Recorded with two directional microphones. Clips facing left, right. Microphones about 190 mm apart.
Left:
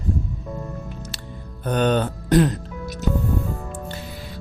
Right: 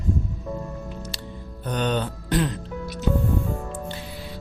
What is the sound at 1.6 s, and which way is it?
Speech, 50° left (ahead or behind).